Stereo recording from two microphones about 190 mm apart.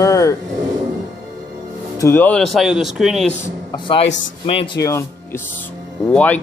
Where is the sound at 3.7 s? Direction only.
25° left (ahead or behind).